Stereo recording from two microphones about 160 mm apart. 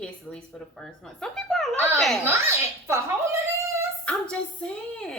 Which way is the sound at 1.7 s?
20° right (ahead or behind).